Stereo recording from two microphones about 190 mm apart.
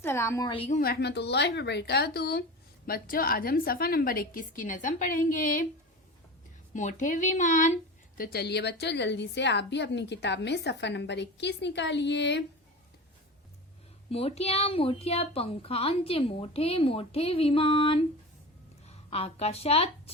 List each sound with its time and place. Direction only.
0.0 s a woman's voice: 15° left (ahead or behind)
0.5 s a woman's voice: 30° left (ahead or behind)
0.8 s a woman's voice: 55° left (ahead or behind)
6.7 s speech: 40° left (ahead or behind); by 12.4 s 65° left (ahead or behind)
14.1 s a woman's voice: 30° left (ahead or behind)